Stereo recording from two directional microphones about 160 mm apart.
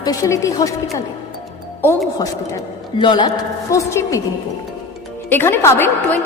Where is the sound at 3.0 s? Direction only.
30° left (ahead or behind).